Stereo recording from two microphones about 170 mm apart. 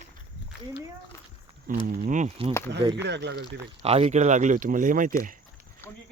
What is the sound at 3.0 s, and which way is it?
Speech, 90° right.